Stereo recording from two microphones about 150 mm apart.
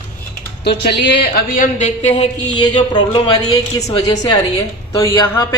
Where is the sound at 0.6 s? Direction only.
90° left; by 1.9 s 55° left (ahead or behind).